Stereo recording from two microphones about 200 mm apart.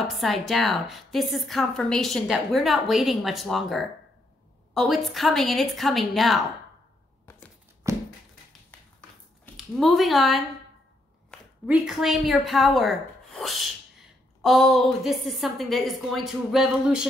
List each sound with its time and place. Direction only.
0.2 s a woman's voice: centre (ahead or behind)
7.8 s a sound: 15° right (ahead or behind)
9.8 s a woman's voice: centre (ahead or behind)